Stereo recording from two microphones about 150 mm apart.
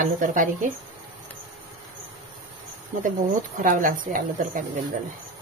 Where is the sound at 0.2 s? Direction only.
60° right (ahead or behind).